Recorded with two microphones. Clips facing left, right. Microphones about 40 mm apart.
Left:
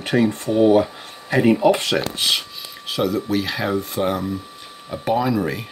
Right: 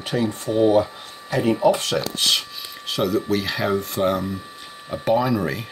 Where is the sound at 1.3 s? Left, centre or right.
Left.